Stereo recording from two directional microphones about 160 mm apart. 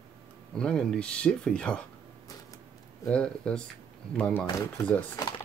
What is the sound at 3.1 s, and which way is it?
Speech, 5° left (ahead or behind).